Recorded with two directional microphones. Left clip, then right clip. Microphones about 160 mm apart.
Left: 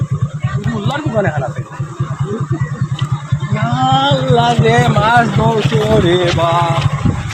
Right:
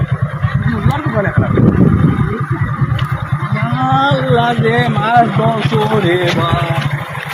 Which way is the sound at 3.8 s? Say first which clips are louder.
Even; 25° right (ahead or behind).